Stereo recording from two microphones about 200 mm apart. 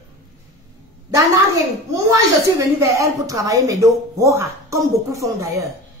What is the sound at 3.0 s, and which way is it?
A woman's voice, 15° right (ahead or behind).